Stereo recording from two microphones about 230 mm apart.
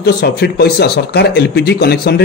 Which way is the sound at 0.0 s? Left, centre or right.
Left.